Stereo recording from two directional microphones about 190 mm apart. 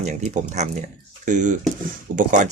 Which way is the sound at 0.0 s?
40° right (ahead or behind).